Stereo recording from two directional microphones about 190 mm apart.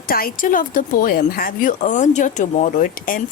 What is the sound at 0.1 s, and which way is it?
Speech, 50° left (ahead or behind).